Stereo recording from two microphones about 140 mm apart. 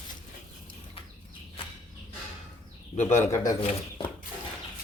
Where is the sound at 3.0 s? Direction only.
60° left (ahead or behind).